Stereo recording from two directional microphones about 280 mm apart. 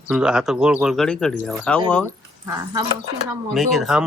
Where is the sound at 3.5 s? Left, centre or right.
Centre.